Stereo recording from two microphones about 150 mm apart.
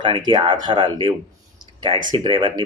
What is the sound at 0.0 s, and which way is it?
Speech, 30° right (ahead or behind).